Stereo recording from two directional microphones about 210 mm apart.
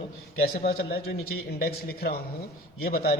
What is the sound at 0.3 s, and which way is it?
A man's voice, 45° left (ahead or behind).